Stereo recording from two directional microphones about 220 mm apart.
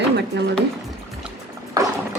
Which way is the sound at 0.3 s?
50° right (ahead or behind).